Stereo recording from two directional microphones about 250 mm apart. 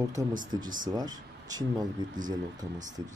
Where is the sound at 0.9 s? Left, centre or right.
Centre.